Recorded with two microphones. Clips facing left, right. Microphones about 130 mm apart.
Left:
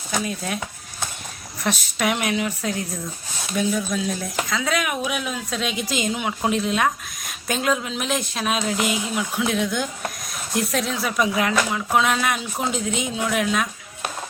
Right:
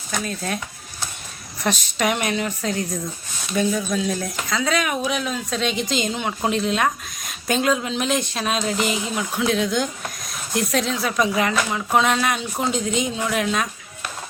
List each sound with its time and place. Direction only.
0.3 s speech: 5° left (ahead or behind)
1.6 s speech: centre (ahead or behind)